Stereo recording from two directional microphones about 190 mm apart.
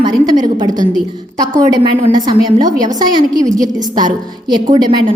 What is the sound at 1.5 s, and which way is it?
A woman's voice, 20° right (ahead or behind).